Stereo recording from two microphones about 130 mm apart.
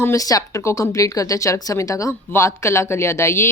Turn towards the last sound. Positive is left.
turn(degrees=20)  # may be behind; listen again after turning